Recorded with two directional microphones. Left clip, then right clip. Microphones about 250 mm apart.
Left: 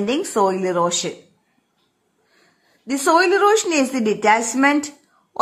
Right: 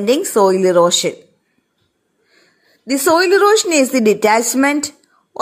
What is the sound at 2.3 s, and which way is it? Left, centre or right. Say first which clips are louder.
Speech: right 5 dB; centre.